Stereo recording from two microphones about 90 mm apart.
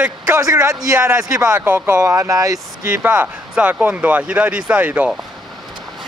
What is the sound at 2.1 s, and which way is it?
Speech, 40° right (ahead or behind).